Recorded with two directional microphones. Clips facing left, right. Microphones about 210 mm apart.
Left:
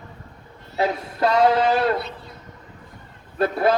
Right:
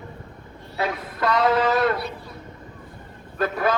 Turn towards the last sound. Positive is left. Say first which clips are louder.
# left 3 dB
turn(degrees=30)  # may be behind; listen again after turning